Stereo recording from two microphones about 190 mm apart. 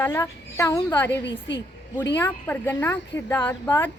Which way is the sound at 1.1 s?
70° left (ahead or behind).